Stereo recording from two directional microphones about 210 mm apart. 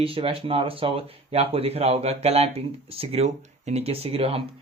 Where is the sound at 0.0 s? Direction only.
25° right (ahead or behind).